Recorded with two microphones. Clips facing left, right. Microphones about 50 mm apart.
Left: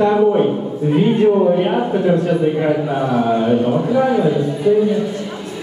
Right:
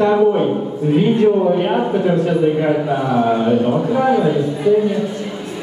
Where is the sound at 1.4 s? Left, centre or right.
Centre.